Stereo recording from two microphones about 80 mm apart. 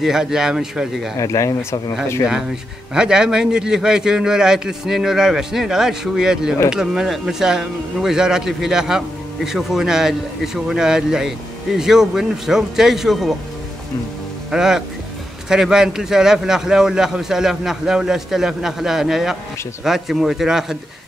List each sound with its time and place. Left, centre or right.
0.0 s a man's voice: centre
1.1 s speech: left
2.9 s a man's voice: centre
14.5 s a man's voice: centre